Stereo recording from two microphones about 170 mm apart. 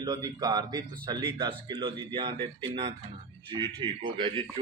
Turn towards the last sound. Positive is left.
turn(degrees=-30)  # may be behind; listen again after turning